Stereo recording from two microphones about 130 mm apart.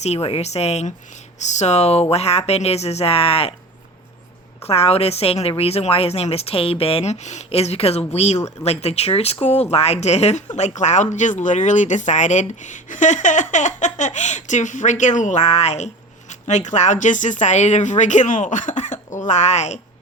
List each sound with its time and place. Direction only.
0.0 s a woman's voice: 50° left (ahead or behind)
4.6 s a woman's voice: 50° left (ahead or behind)